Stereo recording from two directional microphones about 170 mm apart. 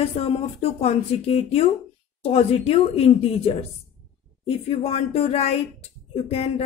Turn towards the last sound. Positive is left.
turn(degrees=35)  # may be behind; listen again after turning